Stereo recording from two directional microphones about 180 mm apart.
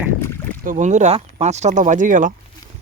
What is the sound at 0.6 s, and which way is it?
Speech, 45° right (ahead or behind).